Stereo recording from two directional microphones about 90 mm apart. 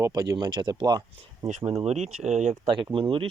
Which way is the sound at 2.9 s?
75° right (ahead or behind).